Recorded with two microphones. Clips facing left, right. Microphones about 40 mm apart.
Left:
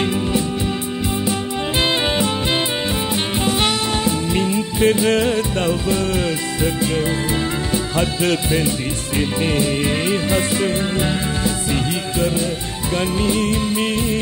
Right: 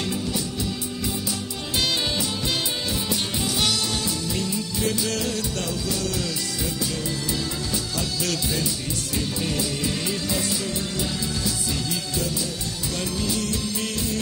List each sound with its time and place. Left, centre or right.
0.0 s music: left
3.1 s music: left
7.7 s speech: left
12.9 s music: left